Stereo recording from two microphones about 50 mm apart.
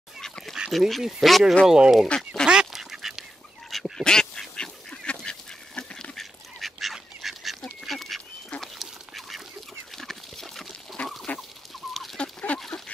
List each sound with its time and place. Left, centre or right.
0.2 s duck: centre
0.7 s speech: centre
1.7 s speech: centre
2.0 s duck: centre
2.4 s duck: centre
4.0 s duck: centre
6.1 s duck: centre
9.9 s pig: centre
11.3 s chicken: left
11.9 s chicken: centre
12.2 s a sound: left
12.5 s duck: centre